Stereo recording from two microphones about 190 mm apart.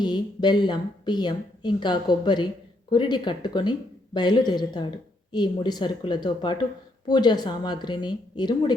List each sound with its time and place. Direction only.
0.0 s a woman's voice: 25° left (ahead or behind)